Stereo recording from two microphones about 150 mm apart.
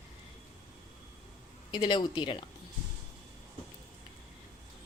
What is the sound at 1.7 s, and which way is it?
Speech, 30° left (ahead or behind).